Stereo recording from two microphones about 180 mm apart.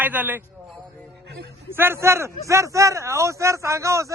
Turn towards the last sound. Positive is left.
turn(degrees=-15)  # may be behind; listen again after turning